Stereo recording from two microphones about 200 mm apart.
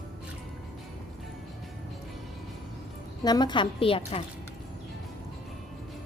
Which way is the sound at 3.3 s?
20° left (ahead or behind).